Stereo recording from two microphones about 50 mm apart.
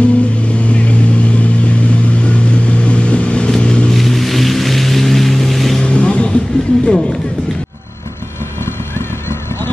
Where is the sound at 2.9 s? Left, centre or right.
Left.